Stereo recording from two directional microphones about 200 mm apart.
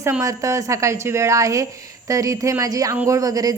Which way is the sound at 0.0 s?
15° right (ahead or behind).